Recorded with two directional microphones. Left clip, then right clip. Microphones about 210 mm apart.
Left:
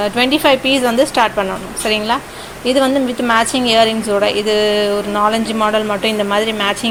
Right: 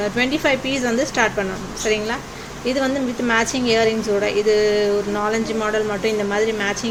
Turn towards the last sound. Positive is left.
turn(degrees=20)  # may be behind; listen again after turning